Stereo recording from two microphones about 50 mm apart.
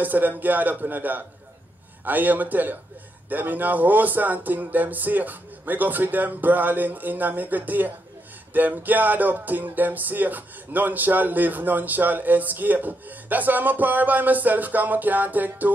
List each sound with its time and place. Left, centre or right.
0.0 s music: right